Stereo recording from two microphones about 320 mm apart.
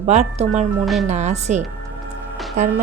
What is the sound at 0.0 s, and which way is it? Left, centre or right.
Speech, right.